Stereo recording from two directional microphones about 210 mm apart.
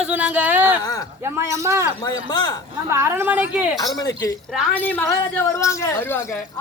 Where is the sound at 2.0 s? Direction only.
20° left (ahead or behind).